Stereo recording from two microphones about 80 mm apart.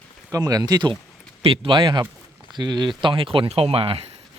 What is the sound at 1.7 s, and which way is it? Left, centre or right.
Speech, right.